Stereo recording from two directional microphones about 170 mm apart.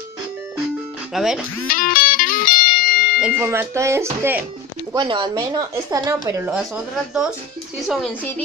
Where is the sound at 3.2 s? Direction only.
15° right (ahead or behind).